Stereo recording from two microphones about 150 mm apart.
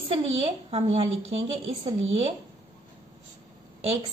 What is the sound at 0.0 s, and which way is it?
A woman's voice, 40° right (ahead or behind).